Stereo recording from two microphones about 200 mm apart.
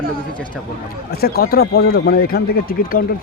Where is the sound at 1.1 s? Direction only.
50° left (ahead or behind).